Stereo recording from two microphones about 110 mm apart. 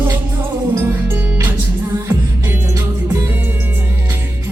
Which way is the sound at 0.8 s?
20° right (ahead or behind).